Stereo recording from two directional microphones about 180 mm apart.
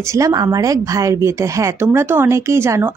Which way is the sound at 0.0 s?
15° right (ahead or behind).